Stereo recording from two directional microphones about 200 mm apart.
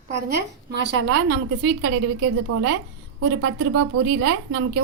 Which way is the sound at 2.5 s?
90° right.